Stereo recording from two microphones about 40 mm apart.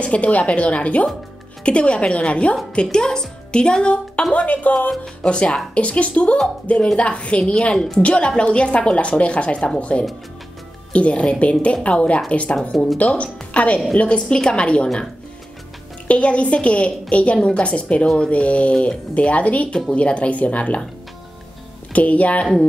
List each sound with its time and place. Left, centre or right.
0.0 s a woman's voice: left
5.2 s a woman's voice: left
16.1 s speech: left
21.9 s speech: left